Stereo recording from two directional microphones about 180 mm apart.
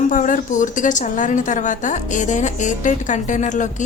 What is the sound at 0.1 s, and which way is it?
A woman's voice, 45° left (ahead or behind).